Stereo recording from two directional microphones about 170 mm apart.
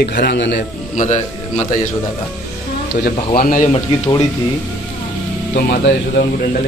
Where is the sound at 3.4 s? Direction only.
55° left (ahead or behind).